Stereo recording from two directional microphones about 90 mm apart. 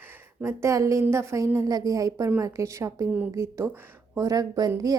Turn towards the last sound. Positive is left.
turn(degrees=-45)  # may be behind; listen again after turning